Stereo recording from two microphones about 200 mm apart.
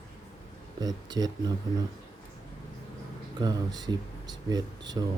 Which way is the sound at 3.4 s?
20° right (ahead or behind).